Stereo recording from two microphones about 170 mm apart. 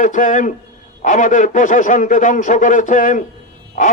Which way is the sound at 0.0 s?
50° left (ahead or behind).